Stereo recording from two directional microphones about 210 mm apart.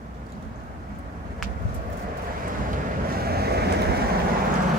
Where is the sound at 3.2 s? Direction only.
50° right (ahead or behind).